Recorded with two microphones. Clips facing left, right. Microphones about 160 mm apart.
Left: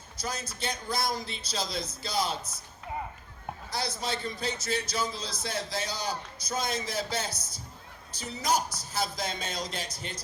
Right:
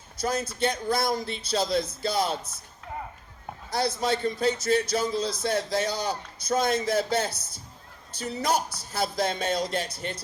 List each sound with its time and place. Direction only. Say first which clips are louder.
0.2 s speech: right 9 dB; 55° right (ahead or behind)
3.7 s speech: right 8 dB; 55° right (ahead or behind)
8.4 s speech: right 2 dB; 60° right (ahead or behind)